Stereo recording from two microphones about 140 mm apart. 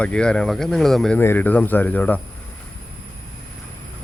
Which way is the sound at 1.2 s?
15° left (ahead or behind).